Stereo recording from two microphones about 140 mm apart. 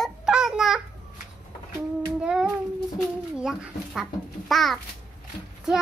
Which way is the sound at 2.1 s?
5° right (ahead or behind).